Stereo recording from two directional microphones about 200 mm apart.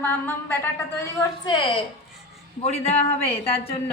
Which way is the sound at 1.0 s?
20° left (ahead or behind).